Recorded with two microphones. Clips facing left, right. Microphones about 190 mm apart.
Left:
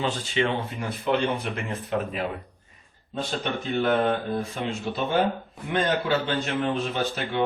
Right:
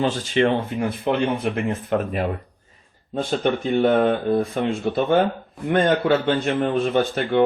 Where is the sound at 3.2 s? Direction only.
55° right (ahead or behind).